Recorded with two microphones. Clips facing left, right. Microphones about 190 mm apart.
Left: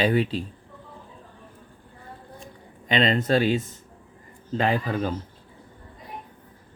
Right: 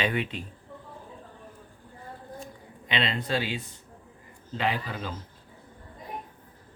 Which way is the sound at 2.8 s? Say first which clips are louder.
Left 8 dB; 45° left (ahead or behind).